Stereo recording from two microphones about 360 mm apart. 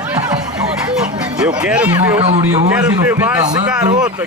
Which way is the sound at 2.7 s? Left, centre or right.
Centre.